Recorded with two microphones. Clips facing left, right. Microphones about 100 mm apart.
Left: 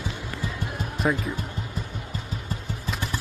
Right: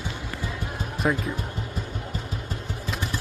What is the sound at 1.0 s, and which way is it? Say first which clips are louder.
Speech: even; centre (ahead or behind).